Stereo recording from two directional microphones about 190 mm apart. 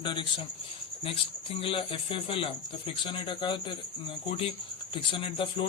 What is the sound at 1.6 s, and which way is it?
Speech, 30° left (ahead or behind).